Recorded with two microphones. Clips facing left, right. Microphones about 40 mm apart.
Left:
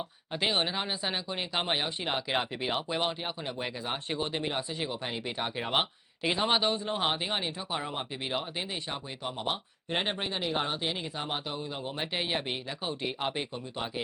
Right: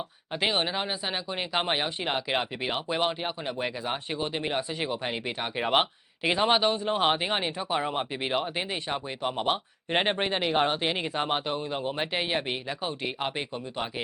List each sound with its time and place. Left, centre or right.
0.3 s speech: centre